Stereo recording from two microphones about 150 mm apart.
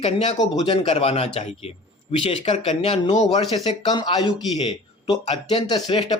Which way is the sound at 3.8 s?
30° left (ahead or behind).